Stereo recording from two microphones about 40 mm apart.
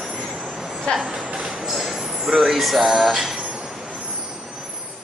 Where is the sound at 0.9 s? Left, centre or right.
Left.